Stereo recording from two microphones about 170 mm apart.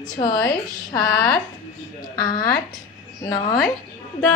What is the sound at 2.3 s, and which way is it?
Speech, 65° left (ahead or behind).